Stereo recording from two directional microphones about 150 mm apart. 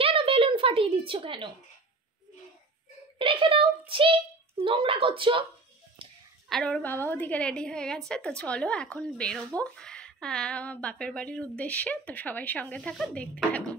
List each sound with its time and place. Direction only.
0.0 s a sound: 35° right (ahead or behind)
3.2 s a child's voice: 35° right (ahead or behind)
6.5 s a woman's voice: 5° left (ahead or behind)